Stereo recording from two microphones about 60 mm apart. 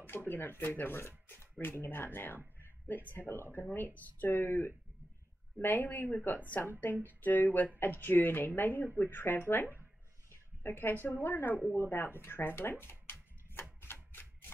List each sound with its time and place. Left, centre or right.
0.0 s speech: left
13.1 s tick-tock: left
13.6 s a sound: left